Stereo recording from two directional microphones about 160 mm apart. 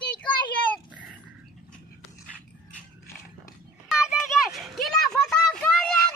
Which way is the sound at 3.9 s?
5° right (ahead or behind).